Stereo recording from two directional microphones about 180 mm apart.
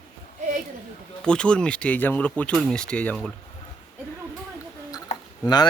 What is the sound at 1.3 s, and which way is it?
Speech, 5° left (ahead or behind).